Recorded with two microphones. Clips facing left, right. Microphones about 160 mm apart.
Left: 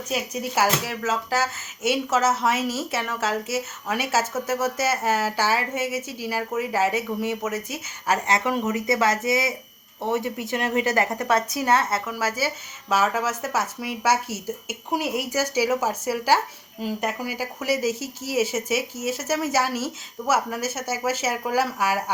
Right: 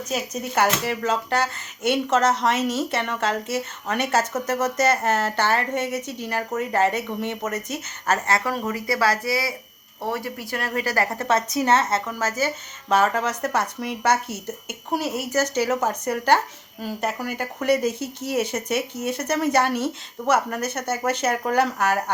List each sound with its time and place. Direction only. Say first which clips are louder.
0.1 s a woman's voice: even; 10° left (ahead or behind)